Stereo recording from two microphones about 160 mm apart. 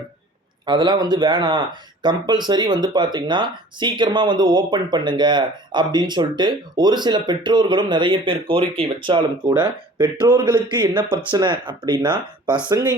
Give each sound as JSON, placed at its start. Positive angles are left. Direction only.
{"t": 0.6, "sound": "speech", "side_deg": -25}